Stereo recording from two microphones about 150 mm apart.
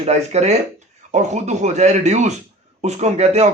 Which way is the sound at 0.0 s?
45° right (ahead or behind).